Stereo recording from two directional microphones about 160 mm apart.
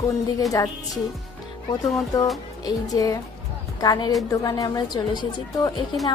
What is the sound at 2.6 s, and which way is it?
A woman's voice, 20° left (ahead or behind).